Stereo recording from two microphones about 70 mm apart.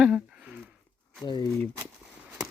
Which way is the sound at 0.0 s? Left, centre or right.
Centre.